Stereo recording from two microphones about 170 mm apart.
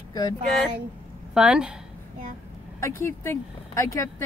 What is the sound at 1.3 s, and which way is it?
Speech, 5° right (ahead or behind).